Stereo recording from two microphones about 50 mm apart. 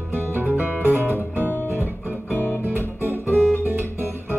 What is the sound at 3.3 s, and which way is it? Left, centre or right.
Guitar, left.